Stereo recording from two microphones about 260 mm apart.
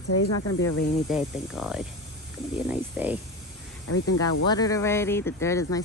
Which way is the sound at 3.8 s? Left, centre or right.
Left.